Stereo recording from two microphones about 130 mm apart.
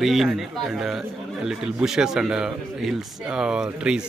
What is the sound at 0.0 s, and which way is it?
Speech, centre (ahead or behind).